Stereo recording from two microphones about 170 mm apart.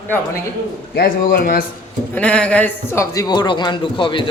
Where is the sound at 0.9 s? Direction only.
65° left (ahead or behind).